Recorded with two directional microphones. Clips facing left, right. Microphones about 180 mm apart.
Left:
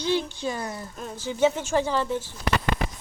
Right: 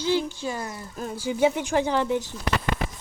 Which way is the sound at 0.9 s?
5° right (ahead or behind).